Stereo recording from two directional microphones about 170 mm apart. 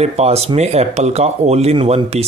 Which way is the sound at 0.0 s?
40° right (ahead or behind).